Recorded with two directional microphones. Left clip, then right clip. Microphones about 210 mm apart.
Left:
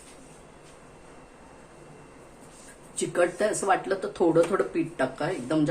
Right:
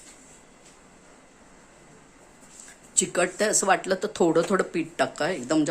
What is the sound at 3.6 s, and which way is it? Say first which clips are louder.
Speech: right 2 dB; 60° right (ahead or behind).